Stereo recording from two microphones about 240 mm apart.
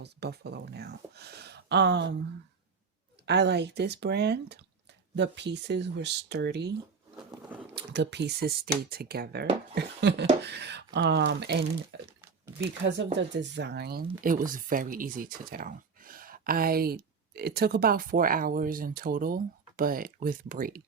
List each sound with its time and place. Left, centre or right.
0.0 s speech: right
3.2 s speech: right
7.4 s a sound: centre
7.8 s speech: right